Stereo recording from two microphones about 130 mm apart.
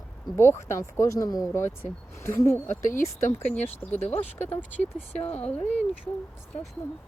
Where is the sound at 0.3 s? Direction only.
20° left (ahead or behind).